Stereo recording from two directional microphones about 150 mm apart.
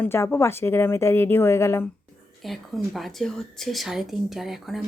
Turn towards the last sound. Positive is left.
turn(degrees=0)  # may be behind; listen again after turning